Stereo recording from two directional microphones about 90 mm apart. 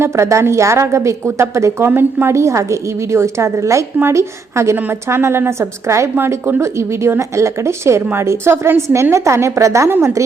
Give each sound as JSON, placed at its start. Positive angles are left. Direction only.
{"t": 0.0, "sound": "a woman's voice", "side_deg": -35}